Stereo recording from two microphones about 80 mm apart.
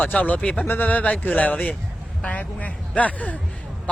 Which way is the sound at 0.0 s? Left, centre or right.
Centre.